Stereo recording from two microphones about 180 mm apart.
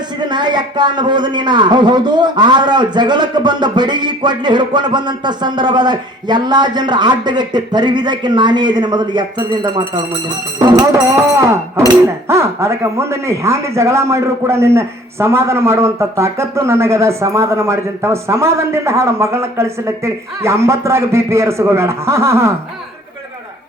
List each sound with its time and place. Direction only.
0.2 s a man's voice: 25° right (ahead or behind)